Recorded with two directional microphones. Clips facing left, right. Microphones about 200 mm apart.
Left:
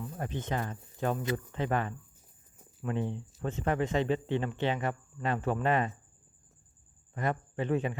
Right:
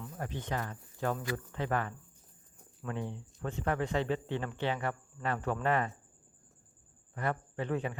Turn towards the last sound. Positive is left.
turn(degrees=20)  # may be behind; listen again after turning